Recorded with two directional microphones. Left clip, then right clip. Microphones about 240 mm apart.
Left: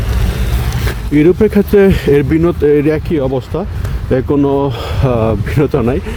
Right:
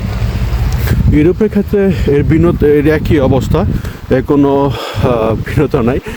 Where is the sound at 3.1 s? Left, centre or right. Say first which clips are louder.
Right 4 dB; right.